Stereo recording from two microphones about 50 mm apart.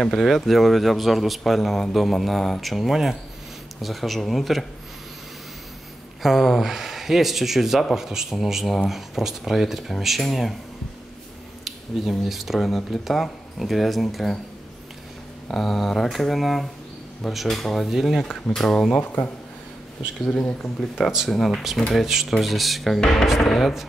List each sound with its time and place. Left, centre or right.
0.0 s a man's voice: centre
6.2 s a man's voice: centre
11.6 s a man's voice: centre
15.4 s a man's voice: centre
18.5 s speech: centre
20.2 s speech: centre
21.3 s a man's voice: centre